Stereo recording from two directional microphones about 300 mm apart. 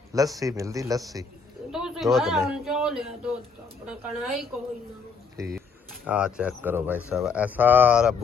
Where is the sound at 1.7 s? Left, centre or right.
Centre.